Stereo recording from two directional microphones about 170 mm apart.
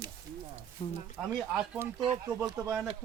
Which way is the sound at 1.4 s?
Centre (ahead or behind).